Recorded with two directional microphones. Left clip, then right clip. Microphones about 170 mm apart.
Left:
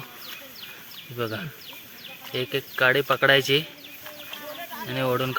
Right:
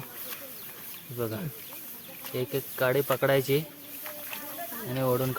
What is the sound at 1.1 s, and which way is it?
Speech, 5° left (ahead or behind).